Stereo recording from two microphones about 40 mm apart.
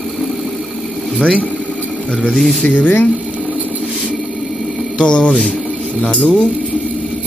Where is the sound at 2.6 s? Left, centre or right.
Left.